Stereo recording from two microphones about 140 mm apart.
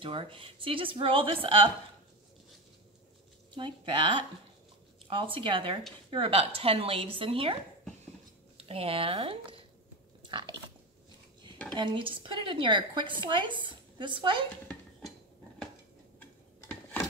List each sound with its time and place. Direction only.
0.0 s a woman's voice: 40° right (ahead or behind)
3.5 s a woman's voice: 35° right (ahead or behind)
8.5 s speech: 45° right (ahead or behind)
10.2 s biting: 30° right (ahead or behind)
11.7 s a woman's voice: 35° right (ahead or behind)